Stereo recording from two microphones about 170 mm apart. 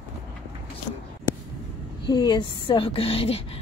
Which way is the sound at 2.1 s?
25° left (ahead or behind).